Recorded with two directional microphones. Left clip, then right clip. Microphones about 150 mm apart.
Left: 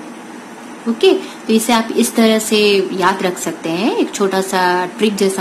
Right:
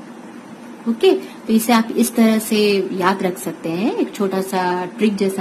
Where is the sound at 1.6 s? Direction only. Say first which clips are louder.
Right 1 dB; 10° right (ahead or behind).